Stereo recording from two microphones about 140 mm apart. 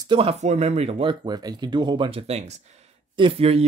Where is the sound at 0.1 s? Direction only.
45° right (ahead or behind).